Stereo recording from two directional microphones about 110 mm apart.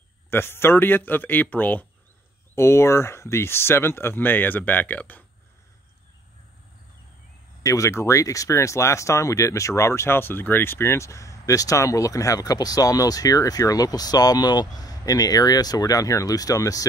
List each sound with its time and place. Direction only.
0.3 s speech: 20° left (ahead or behind)
7.6 s speech: 30° left (ahead or behind)